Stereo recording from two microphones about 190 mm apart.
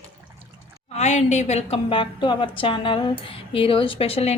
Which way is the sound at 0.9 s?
35° left (ahead or behind).